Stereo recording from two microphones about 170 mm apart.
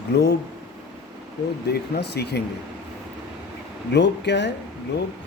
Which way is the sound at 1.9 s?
75° left (ahead or behind).